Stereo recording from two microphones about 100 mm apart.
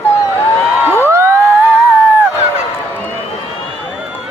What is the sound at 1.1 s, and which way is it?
Crowd, 25° right (ahead or behind).